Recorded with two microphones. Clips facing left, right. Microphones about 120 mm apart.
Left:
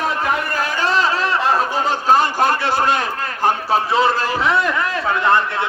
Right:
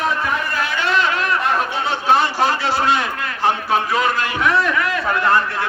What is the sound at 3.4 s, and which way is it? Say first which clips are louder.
A man's voice: left 1 dB; 35° left (ahead or behind).